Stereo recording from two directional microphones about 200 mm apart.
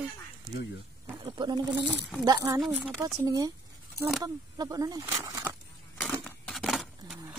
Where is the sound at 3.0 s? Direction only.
15° right (ahead or behind).